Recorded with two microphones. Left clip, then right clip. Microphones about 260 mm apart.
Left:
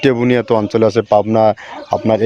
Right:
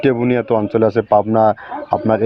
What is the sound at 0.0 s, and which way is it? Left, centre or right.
Speech, left.